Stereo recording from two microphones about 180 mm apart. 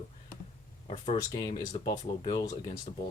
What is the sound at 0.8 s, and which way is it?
Speech, 35° left (ahead or behind).